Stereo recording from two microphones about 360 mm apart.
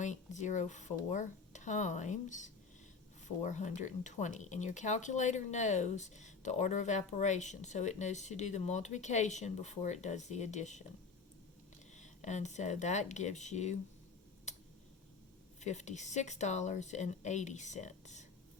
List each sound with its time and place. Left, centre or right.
0.0 s speech: centre
11.9 s speech: centre
14.5 s a sound: centre
15.6 s speech: centre